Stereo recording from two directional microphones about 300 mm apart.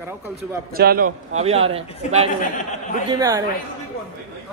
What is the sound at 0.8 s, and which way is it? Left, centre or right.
A man's voice, right.